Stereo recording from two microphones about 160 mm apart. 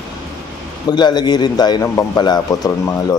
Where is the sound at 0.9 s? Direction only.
25° left (ahead or behind).